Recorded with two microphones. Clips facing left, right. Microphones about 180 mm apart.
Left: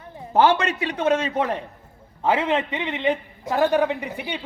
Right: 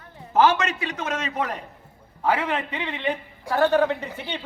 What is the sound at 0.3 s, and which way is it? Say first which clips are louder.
A man's voice: left 1 dB; 30° left (ahead or behind).